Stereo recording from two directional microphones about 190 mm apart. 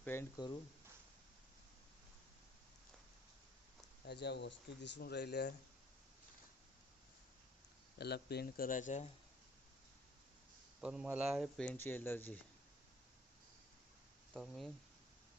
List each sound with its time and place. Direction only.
0.0 s speech: 10° left (ahead or behind)
4.0 s speech: 60° left (ahead or behind)
7.9 s speech: 60° left (ahead or behind); by 9.0 s 40° left (ahead or behind)
10.8 s speech: 5° right (ahead or behind); by 12.4 s 10° left (ahead or behind)
14.3 s speech: centre (ahead or behind)